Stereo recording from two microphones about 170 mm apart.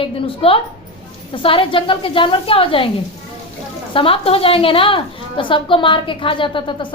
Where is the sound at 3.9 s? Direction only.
35° left (ahead or behind).